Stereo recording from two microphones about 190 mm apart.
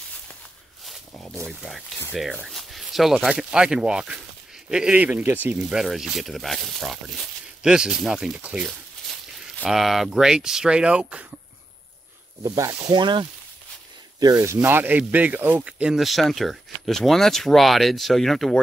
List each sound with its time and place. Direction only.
0.8 s a sound: centre (ahead or behind)
2.4 s speech: centre (ahead or behind)
12.4 s speech: 20° right (ahead or behind); by 18.6 s centre (ahead or behind)